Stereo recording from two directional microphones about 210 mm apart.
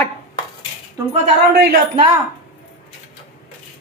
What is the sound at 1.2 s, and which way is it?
Speech, 30° right (ahead or behind).